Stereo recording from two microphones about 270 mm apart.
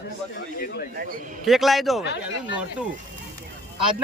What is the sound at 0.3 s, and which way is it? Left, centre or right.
Speech, left.